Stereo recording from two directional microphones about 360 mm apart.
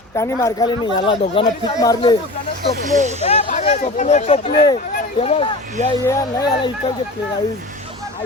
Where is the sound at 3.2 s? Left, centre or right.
Centre.